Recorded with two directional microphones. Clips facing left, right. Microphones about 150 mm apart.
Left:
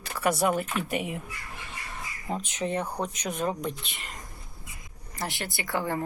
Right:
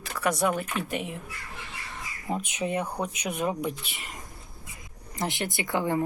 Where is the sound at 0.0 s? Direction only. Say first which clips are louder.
Left 1 dB; 5° left (ahead or behind).